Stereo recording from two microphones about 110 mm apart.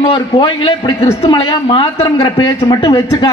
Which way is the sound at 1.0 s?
60° left (ahead or behind).